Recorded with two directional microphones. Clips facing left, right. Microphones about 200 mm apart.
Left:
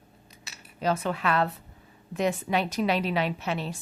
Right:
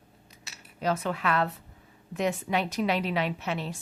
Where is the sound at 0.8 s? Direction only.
30° left (ahead or behind).